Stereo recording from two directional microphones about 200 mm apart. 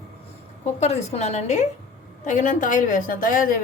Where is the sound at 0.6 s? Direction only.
35° left (ahead or behind).